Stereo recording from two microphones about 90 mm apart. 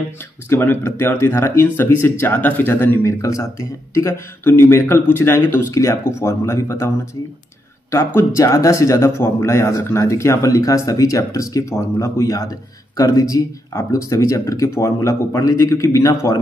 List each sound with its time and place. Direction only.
0.5 s speech: 25° left (ahead or behind)
3.0 s speech: 35° left (ahead or behind)
7.9 s speech: 30° left (ahead or behind)